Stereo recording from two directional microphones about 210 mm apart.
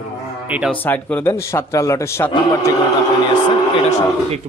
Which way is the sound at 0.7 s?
5° left (ahead or behind).